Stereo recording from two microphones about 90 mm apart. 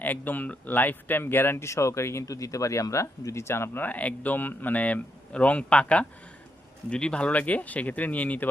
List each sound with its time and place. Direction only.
0.0 s speech: 20° left (ahead or behind)